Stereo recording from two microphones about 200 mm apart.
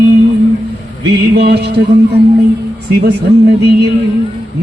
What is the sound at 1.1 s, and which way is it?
Music, 55° right (ahead or behind).